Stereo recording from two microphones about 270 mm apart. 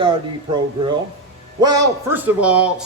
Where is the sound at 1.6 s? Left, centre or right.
Centre.